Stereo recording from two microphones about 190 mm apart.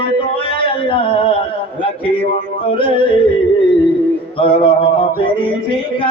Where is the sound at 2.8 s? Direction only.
25° left (ahead or behind).